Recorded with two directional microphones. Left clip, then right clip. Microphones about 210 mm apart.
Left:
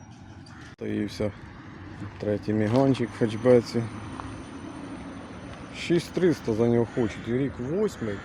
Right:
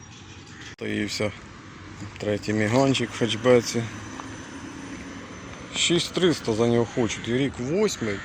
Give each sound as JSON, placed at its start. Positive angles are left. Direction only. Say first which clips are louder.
{"t": 0.8, "sound": "speech", "louder": "right 3 dB", "side_deg": 10}
{"t": 5.7, "sound": "speech", "louder": "right 4 dB", "side_deg": 10}
{"t": 7.7, "sound": "speech", "louder": "right 4 dB", "side_deg": -15}